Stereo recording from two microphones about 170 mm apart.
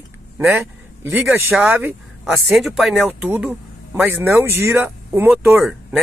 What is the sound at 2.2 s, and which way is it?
Speech, centre (ahead or behind).